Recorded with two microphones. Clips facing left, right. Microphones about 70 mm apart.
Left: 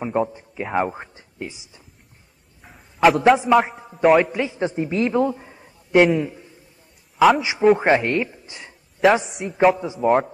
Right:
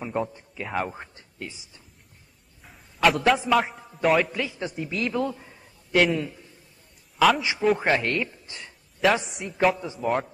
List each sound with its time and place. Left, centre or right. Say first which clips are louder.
0.0 s speech: left 6 dB; centre
2.6 s a sound: left 6 dB; centre
3.2 s a man's voice: left 6 dB; centre
3.5 s a man's voice: left 6 dB; centre
4.3 s a man's voice: left 7 dB; left
7.2 s a man's voice: left 5 dB; centre
7.7 s speech: left 6 dB; left
9.2 s a man's voice: left 6 dB; centre